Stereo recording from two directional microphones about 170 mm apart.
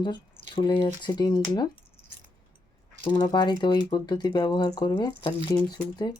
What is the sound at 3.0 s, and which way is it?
Speech, 25° left (ahead or behind).